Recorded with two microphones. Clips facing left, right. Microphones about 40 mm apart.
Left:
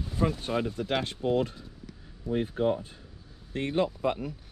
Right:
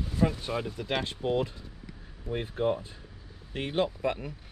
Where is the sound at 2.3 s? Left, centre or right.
Right.